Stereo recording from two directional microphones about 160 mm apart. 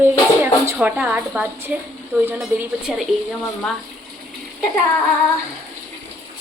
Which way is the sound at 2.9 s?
Centre (ahead or behind).